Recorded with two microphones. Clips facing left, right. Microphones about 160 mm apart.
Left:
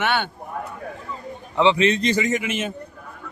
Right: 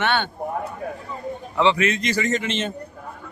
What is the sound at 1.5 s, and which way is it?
Speech, 20° left (ahead or behind).